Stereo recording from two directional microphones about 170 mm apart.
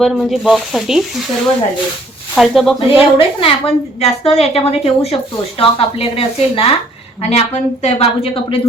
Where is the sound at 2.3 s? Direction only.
Centre (ahead or behind).